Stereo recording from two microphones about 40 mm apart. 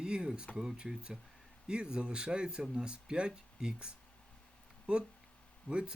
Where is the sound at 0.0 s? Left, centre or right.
Centre.